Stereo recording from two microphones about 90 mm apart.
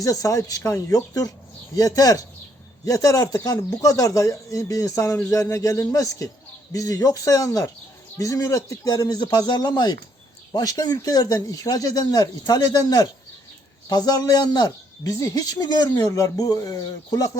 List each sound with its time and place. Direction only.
0.0 s a man's voice: 40° left (ahead or behind)